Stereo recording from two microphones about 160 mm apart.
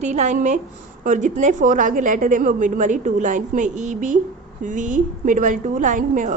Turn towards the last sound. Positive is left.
turn(degrees=-55)  # may be behind; listen again after turning